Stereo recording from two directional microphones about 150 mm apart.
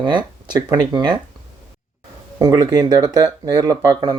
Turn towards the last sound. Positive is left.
turn(degrees=-25)  # may be behind; listen again after turning